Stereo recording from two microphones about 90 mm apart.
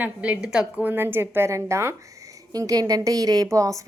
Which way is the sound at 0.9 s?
25° right (ahead or behind).